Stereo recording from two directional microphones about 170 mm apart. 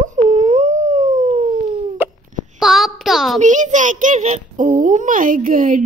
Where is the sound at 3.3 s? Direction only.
45° right (ahead or behind).